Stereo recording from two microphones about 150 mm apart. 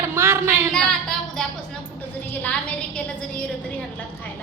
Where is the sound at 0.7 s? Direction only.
5° left (ahead or behind).